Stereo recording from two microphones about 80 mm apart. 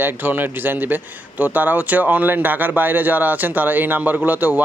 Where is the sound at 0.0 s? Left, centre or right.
Right.